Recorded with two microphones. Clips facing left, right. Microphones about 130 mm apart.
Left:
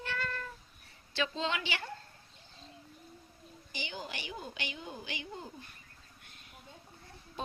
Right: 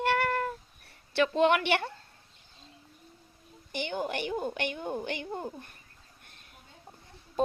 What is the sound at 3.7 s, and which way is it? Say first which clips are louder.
A woman's voice: right 10 dB; 60° right (ahead or behind).